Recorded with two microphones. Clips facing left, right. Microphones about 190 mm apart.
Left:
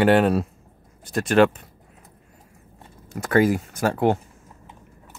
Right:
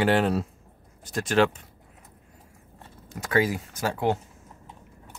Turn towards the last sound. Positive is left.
turn(degrees=55)  # may be behind; listen again after turning